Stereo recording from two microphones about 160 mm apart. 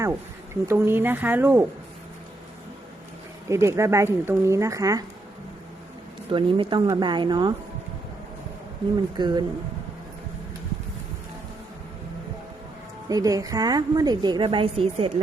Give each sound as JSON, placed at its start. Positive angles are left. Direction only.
{"t": 0.6, "sound": "speech", "side_deg": -15}
{"t": 3.5, "sound": "speech", "side_deg": -15}
{"t": 6.3, "sound": "a woman's voice", "side_deg": -30}
{"t": 9.1, "sound": "a woman's voice", "side_deg": -25}
{"t": 13.1, "sound": "a woman's voice", "side_deg": -20}